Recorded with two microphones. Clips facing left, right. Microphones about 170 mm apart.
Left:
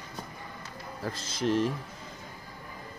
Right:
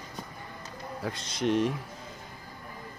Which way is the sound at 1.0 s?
Centre (ahead or behind).